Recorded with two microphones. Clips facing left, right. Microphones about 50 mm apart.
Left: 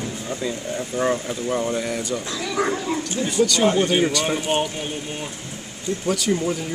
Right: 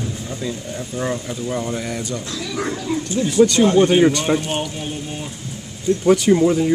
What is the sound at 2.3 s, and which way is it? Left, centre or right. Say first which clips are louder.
Speech: left 3 dB; centre.